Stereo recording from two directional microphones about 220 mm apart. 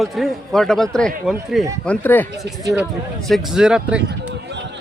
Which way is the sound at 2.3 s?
15° right (ahead or behind).